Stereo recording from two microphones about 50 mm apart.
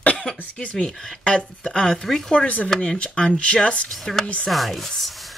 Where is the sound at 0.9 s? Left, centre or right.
Centre.